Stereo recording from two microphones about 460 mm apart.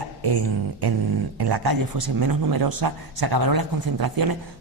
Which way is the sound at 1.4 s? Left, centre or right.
Right.